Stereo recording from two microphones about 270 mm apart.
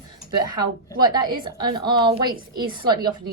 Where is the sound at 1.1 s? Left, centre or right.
Centre.